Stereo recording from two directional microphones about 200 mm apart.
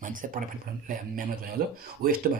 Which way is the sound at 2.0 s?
45° right (ahead or behind).